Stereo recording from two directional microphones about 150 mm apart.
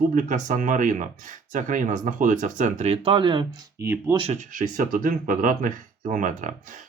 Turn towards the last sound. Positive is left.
turn(degrees=-60)  # may be behind; listen again after turning